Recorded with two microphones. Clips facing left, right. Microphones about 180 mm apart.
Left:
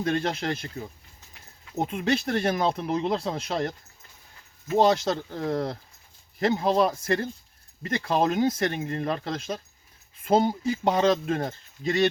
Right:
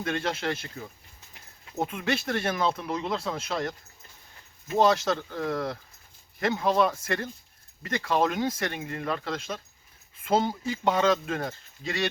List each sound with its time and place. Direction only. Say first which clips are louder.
0.0 s speech: left 3 dB; 35° left (ahead or behind)
1.9 s speech: left 5 dB; 35° left (ahead or behind)
10.7 s speech: even; 35° left (ahead or behind)